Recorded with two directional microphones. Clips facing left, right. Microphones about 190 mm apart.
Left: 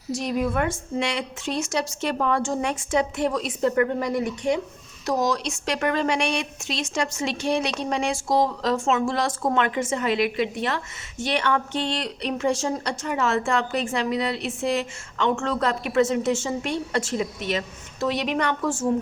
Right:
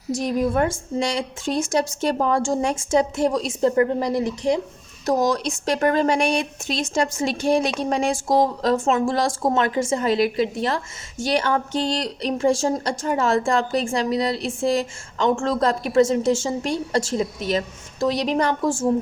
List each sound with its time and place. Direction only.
0.3 s a woman's voice: 35° right (ahead or behind)
5.0 s a woman's voice: 45° right (ahead or behind)